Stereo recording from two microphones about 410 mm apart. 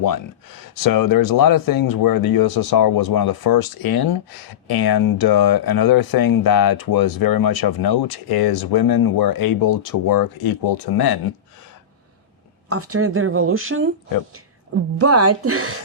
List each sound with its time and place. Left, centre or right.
0.0 s speech: left
12.6 s speech: right
14.9 s speech: right